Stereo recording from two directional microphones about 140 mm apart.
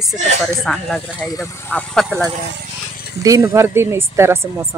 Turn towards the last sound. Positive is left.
turn(degrees=-20)  # may be behind; listen again after turning